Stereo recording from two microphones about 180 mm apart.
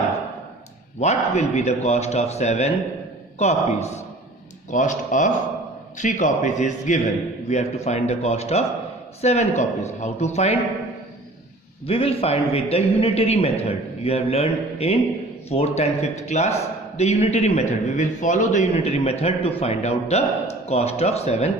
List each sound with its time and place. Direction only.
0.9 s a man's voice: 40° left (ahead or behind)
11.9 s a man's voice: 35° left (ahead or behind)